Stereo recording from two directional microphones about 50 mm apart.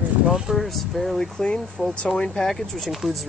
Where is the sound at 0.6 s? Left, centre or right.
Centre.